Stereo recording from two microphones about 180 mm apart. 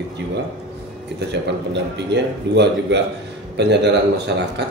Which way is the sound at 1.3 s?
75° right (ahead or behind).